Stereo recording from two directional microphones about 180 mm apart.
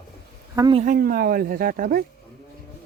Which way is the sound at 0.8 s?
50° right (ahead or behind).